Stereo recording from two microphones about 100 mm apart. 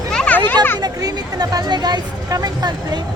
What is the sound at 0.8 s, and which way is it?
Speech, 40° right (ahead or behind).